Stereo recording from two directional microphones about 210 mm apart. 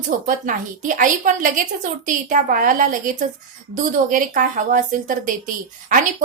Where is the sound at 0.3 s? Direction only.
40° right (ahead or behind).